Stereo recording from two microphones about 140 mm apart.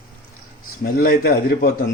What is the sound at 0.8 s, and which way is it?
Speech, 90° left.